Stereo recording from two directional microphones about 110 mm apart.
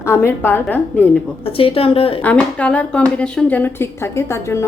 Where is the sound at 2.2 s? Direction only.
10° left (ahead or behind).